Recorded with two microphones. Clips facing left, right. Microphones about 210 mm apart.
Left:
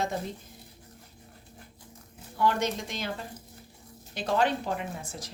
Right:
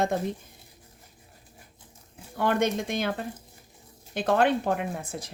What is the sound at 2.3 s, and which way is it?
A woman's voice, 55° right (ahead or behind).